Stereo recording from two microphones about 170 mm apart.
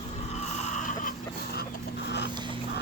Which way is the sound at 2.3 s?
25° right (ahead or behind).